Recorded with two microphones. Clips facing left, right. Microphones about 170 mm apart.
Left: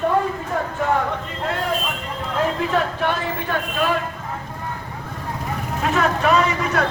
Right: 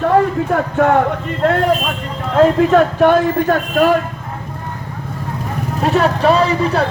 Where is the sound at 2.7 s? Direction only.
50° right (ahead or behind).